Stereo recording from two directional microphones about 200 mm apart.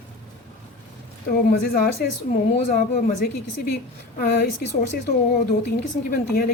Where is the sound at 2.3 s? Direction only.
40° left (ahead or behind).